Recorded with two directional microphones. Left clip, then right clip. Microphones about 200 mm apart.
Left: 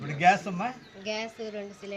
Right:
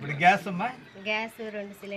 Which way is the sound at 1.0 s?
25° left (ahead or behind).